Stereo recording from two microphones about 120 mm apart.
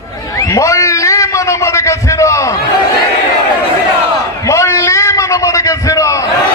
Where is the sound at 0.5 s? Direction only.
25° left (ahead or behind).